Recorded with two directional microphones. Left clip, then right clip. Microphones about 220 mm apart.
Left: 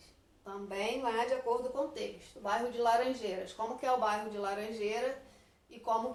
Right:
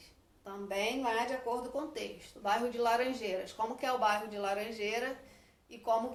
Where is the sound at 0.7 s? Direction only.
20° right (ahead or behind).